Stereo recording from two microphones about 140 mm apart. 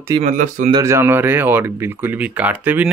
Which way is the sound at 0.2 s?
65° right (ahead or behind).